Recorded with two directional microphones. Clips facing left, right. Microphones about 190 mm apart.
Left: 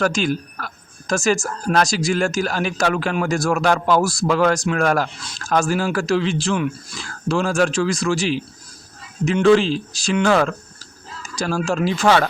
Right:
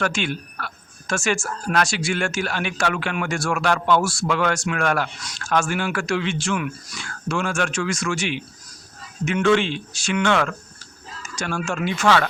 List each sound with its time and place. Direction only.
0.0 s speech: 40° left (ahead or behind)